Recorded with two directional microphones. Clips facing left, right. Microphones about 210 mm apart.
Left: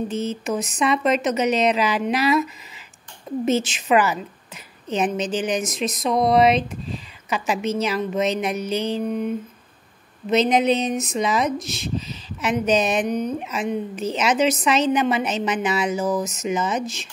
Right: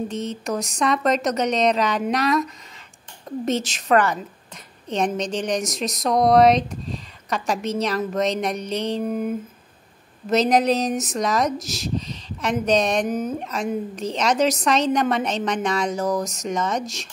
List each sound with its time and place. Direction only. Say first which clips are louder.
0.1 s speech: left 2 dB; 5° left (ahead or behind)
10.3 s speech: even; centre (ahead or behind)